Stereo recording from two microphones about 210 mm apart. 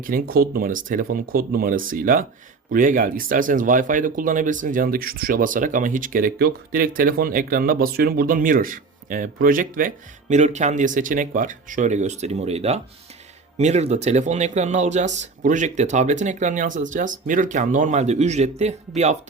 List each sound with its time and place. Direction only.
0.0 s speech: 45° right (ahead or behind)